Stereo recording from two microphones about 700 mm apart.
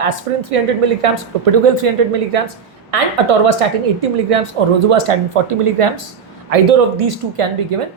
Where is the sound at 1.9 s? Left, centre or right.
Right.